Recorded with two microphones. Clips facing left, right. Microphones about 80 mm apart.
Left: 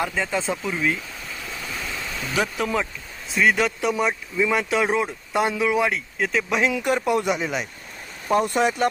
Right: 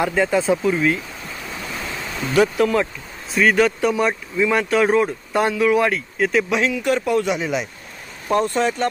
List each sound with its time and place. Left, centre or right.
0.1 s speech: centre
1.6 s ocean: right
2.3 s speech: centre
6.8 s speech: centre
8.3 s speech: centre